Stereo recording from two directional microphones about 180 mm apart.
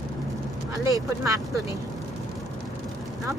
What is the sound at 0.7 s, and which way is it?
Speech, 20° right (ahead or behind).